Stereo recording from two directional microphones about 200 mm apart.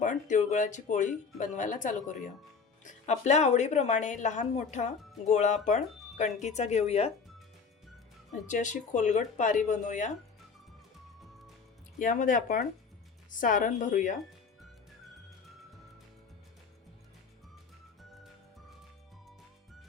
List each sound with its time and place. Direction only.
0.0 s speech: 40° left (ahead or behind)
8.4 s speech: 40° left (ahead or behind)
11.9 s speech: 45° left (ahead or behind)